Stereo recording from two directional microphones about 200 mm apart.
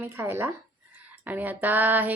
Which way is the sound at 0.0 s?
10° right (ahead or behind).